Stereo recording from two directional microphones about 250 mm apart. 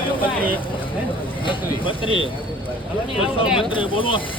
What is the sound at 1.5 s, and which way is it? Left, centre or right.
Speech, left.